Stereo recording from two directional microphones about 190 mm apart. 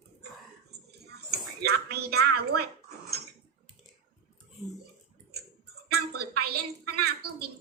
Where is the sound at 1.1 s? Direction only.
60° right (ahead or behind).